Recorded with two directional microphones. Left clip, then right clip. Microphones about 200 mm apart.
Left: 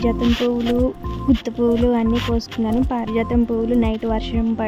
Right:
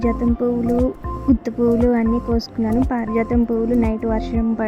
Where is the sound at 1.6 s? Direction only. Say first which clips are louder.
Right 1 dB; 10° right (ahead or behind).